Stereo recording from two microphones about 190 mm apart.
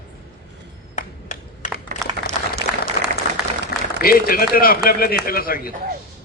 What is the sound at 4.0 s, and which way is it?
A man's voice, 50° left (ahead or behind).